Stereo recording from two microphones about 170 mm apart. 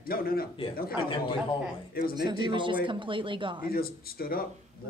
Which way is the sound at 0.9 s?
30° left (ahead or behind).